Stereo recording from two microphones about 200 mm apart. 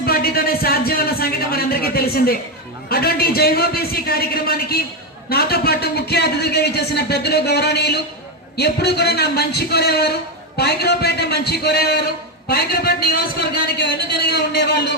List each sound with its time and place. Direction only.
0.0 s a man's voice: 50° left (ahead or behind)